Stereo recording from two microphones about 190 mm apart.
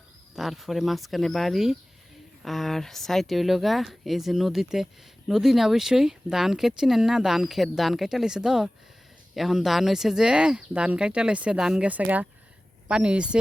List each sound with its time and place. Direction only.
0.3 s speech: centre (ahead or behind)